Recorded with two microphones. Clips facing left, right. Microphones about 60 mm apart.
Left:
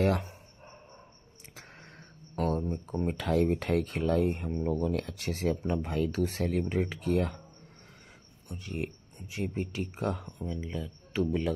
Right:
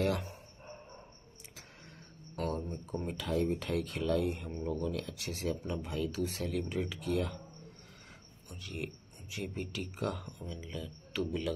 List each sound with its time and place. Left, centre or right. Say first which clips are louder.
1.6 s a sound: left 5 dB; left
3.1 s speech: left 5 dB; left
8.5 s speech: left 5 dB; left